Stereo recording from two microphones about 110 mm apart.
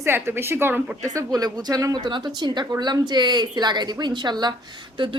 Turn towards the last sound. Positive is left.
turn(degrees=-45)  # may be behind; listen again after turning